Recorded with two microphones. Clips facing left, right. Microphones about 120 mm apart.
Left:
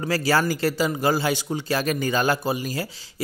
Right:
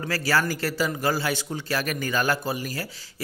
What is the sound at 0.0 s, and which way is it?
A man's voice, 20° left (ahead or behind).